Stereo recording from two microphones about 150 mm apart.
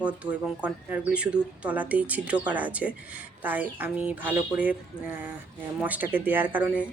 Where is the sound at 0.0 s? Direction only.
10° right (ahead or behind).